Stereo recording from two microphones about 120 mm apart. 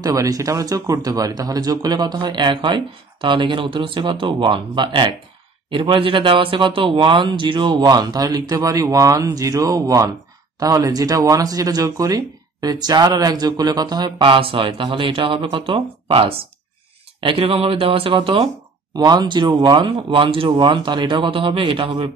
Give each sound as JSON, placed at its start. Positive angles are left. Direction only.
{"t": 0.0, "sound": "speech", "side_deg": -30}